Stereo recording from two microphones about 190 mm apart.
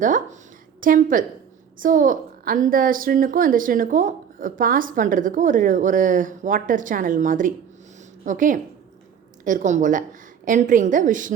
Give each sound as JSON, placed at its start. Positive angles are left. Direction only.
{"t": 0.0, "sound": "a woman's voice", "side_deg": -45}